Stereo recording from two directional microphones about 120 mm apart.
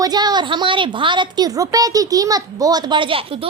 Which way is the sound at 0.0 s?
35° right (ahead or behind).